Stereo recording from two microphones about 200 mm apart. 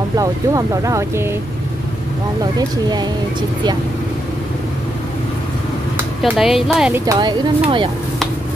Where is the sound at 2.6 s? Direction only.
20° right (ahead or behind).